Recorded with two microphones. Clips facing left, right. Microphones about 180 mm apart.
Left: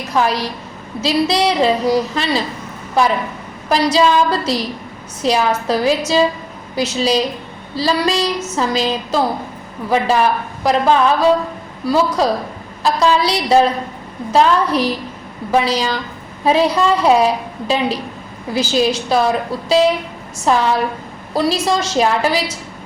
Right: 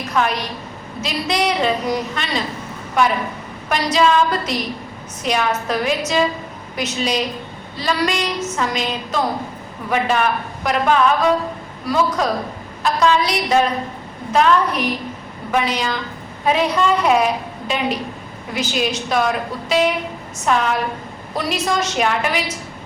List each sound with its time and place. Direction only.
0.1 s a woman's voice: 35° left (ahead or behind)